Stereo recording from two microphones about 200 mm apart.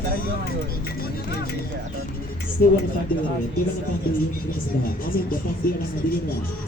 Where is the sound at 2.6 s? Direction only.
45° left (ahead or behind).